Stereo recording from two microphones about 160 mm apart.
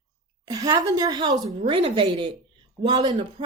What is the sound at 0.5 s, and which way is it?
A woman's voice, 25° right (ahead or behind).